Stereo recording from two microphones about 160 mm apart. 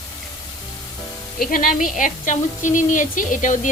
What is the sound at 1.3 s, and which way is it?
A woman's voice, 60° left (ahead or behind).